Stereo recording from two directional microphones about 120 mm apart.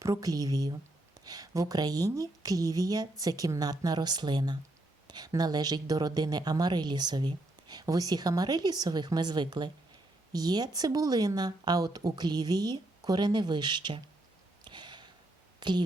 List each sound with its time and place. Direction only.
0.0 s speech: 30° right (ahead or behind)
14.6 s a sound: 40° right (ahead or behind)
15.6 s a woman's voice: 35° right (ahead or behind)